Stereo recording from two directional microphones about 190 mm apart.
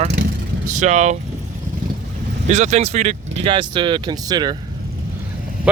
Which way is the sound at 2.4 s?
40° right (ahead or behind).